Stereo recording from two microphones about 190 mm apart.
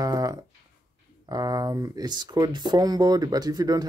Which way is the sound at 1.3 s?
20° right (ahead or behind).